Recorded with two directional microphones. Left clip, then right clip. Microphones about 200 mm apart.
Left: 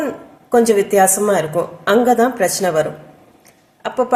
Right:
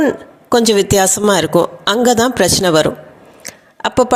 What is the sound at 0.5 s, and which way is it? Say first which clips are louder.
A woman's voice: right 1 dB; 45° right (ahead or behind).